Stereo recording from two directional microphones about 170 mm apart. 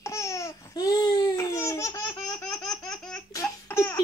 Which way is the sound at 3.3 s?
15° left (ahead or behind).